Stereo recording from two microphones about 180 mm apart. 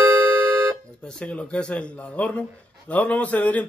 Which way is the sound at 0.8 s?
5° left (ahead or behind).